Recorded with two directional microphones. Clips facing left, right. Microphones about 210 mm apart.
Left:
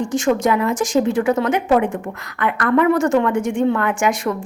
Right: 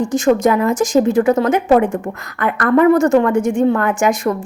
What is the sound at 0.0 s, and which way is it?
A woman's voice, 40° right (ahead or behind).